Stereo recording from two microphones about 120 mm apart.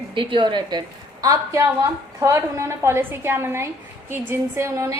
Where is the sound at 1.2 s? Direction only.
25° right (ahead or behind).